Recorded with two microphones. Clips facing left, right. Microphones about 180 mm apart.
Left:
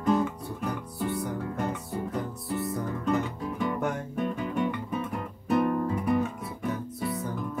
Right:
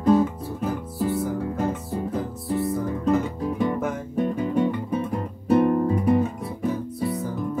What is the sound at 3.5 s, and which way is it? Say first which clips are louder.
Guitar: right 6 dB; 20° right (ahead or behind).